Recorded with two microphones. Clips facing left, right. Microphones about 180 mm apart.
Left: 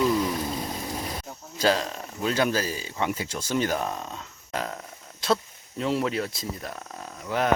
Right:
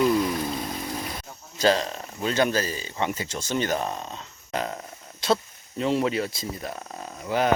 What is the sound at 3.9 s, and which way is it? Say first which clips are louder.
Speech: even; 25° right (ahead or behind).